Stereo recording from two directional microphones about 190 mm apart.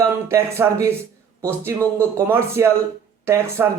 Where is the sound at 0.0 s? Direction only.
15° right (ahead or behind).